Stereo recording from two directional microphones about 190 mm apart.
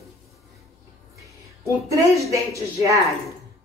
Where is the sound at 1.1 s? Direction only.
15° right (ahead or behind).